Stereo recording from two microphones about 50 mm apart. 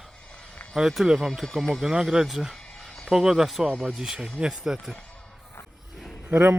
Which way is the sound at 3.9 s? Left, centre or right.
Centre.